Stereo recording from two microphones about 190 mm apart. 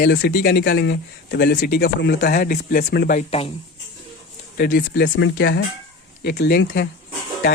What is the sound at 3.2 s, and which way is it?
Speech, 30° left (ahead or behind).